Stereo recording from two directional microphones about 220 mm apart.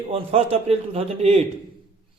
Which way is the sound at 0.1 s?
25° right (ahead or behind).